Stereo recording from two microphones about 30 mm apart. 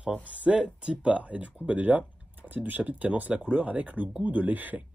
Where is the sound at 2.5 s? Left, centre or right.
Right.